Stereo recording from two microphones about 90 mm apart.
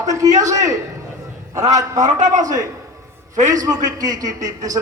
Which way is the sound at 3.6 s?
45° right (ahead or behind).